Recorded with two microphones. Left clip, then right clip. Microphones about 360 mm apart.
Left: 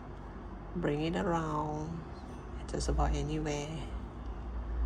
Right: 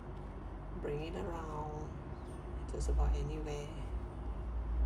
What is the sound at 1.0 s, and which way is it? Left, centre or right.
Speech, left.